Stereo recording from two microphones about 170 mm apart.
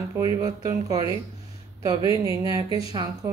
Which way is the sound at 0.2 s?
20° right (ahead or behind).